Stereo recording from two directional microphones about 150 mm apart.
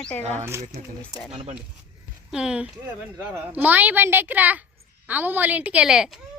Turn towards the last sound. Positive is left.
turn(degrees=-5)  # may be behind; listen again after turning